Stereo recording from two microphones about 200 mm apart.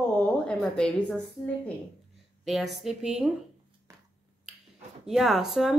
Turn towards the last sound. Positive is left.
turn(degrees=0)  # may be behind; listen again after turning